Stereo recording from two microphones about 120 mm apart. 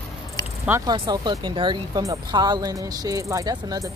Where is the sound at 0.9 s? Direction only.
35° right (ahead or behind).